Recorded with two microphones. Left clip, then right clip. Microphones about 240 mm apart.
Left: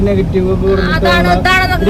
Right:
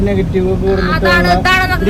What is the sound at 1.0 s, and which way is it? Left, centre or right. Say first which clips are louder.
Speech: even; centre.